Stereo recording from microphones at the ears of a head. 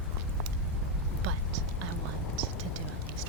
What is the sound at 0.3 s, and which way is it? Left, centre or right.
Whispering, right.